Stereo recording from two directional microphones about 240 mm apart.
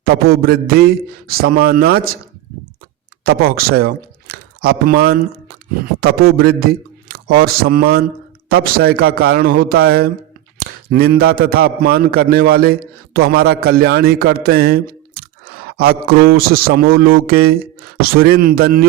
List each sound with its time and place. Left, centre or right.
0.0 s a man's voice: right
3.2 s a man's voice: right